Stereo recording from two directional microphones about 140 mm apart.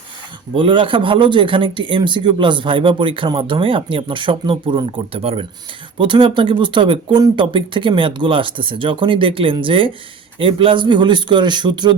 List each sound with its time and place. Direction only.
0.5 s speech: 35° right (ahead or behind)